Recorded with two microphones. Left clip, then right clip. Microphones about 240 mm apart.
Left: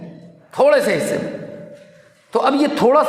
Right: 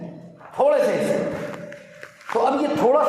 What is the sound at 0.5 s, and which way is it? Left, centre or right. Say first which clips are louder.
Speech: left 5 dB; left.